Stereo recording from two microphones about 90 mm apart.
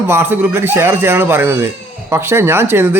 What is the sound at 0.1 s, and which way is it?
A man's voice, 25° right (ahead or behind).